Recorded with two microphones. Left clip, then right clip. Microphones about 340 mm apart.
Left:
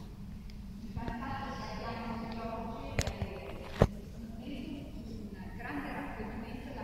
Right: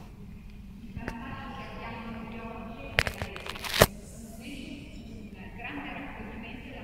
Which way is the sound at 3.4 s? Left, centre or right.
Right.